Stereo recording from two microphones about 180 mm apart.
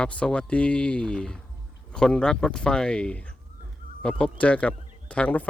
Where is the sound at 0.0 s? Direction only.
5° left (ahead or behind).